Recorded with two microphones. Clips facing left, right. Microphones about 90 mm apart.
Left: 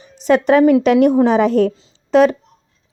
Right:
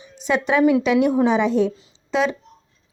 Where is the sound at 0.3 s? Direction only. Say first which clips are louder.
Left 6 dB; 45° left (ahead or behind).